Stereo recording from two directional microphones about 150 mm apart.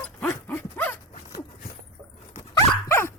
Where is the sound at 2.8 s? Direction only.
15° left (ahead or behind).